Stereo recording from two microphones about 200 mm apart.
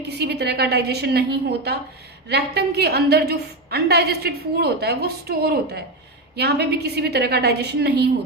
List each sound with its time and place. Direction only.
0.2 s a woman's voice: 55° right (ahead or behind)